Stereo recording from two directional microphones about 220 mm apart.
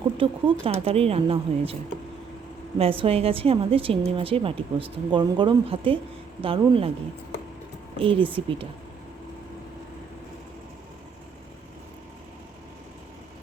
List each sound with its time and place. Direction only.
0.2 s a woman's voice: 25° right (ahead or behind)
2.7 s a woman's voice: 25° right (ahead or behind)
7.9 s a woman's voice: 25° right (ahead or behind)